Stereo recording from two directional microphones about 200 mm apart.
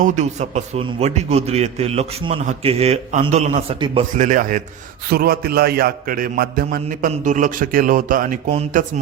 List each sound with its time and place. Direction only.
0.0 s a man's voice: 35° right (ahead or behind)
4.2 s a man's voice: 40° right (ahead or behind)